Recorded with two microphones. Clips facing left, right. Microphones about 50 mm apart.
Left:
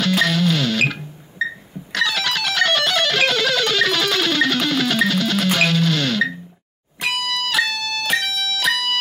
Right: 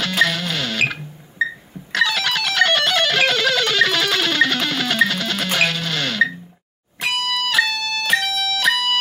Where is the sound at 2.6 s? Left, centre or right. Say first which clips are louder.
Right 2 dB; right.